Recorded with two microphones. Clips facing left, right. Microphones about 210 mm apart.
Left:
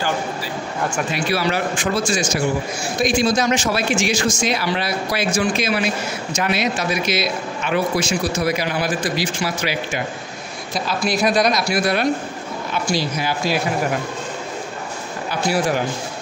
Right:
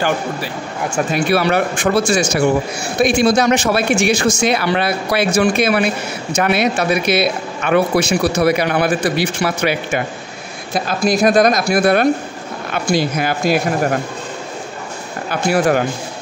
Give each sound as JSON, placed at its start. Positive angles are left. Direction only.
{"t": 1.1, "sound": "a man's voice", "side_deg": -60}
{"t": 15.2, "sound": "a man's voice", "side_deg": -55}